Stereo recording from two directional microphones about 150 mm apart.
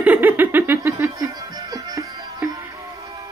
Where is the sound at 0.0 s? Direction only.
10° right (ahead or behind).